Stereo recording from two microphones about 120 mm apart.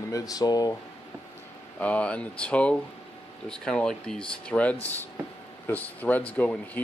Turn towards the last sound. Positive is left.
turn(degrees=10)  # may be behind; listen again after turning